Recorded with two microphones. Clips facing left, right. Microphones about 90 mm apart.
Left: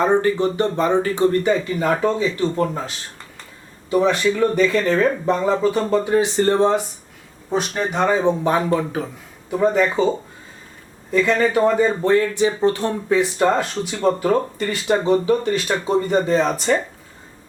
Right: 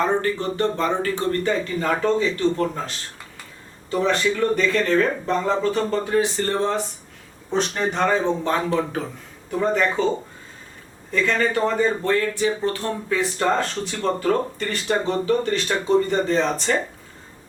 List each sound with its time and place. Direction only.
0.0 s speech: 20° left (ahead or behind)
3.8 s speech: 10° left (ahead or behind)
7.5 s speech: 10° left (ahead or behind)
11.1 s speech: 15° left (ahead or behind)